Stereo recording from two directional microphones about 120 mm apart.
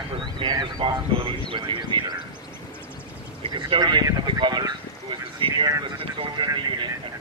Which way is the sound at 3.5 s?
40° right (ahead or behind).